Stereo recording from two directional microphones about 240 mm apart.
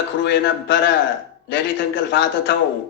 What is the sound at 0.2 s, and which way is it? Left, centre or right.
Speech, left.